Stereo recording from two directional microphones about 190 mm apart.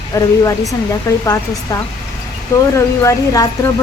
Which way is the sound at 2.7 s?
15° left (ahead or behind).